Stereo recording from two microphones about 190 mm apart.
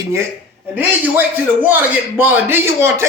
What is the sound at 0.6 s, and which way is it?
A man's voice, 10° right (ahead or behind).